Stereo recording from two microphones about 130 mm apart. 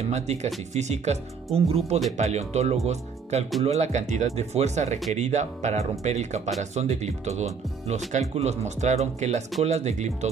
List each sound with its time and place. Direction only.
0.0 s speech: 60° right (ahead or behind)